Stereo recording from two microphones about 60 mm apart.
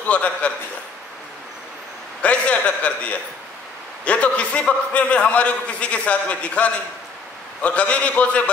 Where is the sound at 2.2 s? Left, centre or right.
Centre.